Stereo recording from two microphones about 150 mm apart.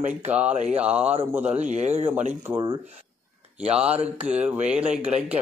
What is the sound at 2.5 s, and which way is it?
Speech, 30° right (ahead or behind).